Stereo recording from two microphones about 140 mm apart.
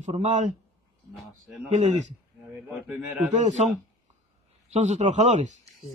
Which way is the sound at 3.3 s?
55° right (ahead or behind).